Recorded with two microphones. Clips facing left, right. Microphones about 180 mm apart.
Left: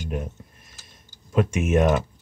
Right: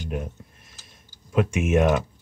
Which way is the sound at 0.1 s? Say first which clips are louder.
Even; centre (ahead or behind).